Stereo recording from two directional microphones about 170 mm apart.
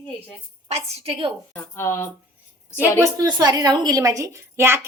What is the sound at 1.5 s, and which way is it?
Speech, 15° left (ahead or behind).